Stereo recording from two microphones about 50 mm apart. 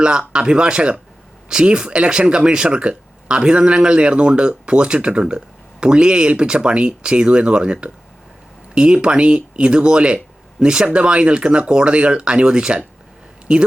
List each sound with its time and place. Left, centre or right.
0.0 s speech: centre